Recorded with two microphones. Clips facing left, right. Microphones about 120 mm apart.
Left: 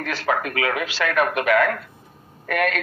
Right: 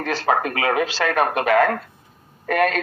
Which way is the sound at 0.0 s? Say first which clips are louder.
Right 3 dB; 30° right (ahead or behind).